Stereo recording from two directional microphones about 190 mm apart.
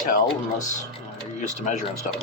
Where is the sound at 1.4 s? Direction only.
40° left (ahead or behind).